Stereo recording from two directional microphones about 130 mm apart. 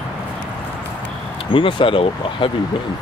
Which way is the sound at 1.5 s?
40° left (ahead or behind).